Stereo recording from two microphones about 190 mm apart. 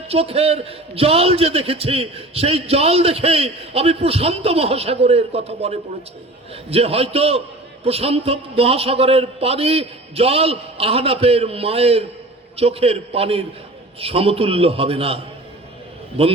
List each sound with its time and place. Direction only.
0.1 s a man's voice: 30° right (ahead or behind)